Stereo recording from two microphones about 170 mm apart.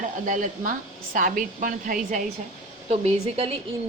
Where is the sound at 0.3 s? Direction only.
50° right (ahead or behind).